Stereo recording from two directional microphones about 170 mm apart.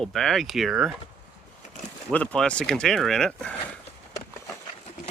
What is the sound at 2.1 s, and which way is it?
Speech, 5° left (ahead or behind).